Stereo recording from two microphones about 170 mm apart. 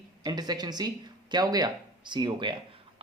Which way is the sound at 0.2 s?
25° right (ahead or behind).